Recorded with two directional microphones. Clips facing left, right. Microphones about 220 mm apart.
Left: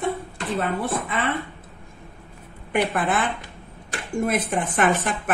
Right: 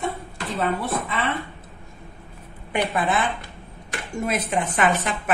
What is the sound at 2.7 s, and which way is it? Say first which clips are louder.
A woman's voice: left 1 dB; 55° left (ahead or behind).